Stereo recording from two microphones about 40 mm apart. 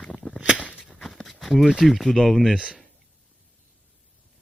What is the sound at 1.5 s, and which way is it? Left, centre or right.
Speech, centre.